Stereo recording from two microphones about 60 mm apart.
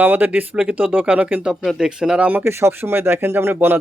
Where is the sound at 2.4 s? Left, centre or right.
Right.